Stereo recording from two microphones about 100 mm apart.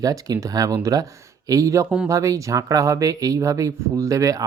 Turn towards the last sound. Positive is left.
turn(degrees=-35)  # may be behind; listen again after turning